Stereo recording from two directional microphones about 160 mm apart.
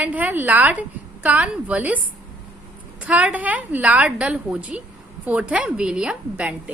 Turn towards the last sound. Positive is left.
turn(degrees=-5)  # may be behind; listen again after turning